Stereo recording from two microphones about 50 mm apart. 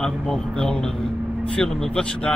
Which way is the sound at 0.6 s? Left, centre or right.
Centre.